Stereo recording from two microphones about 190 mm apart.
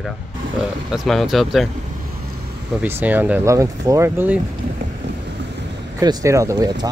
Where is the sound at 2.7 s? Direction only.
10° right (ahead or behind).